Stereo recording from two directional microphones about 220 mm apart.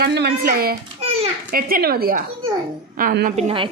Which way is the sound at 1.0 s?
30° right (ahead or behind).